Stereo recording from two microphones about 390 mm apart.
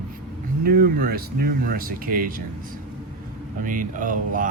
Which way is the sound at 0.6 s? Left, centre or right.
Right.